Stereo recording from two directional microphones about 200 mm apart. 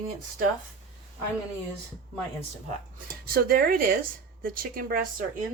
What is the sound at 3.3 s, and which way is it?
Speech, 50° right (ahead or behind).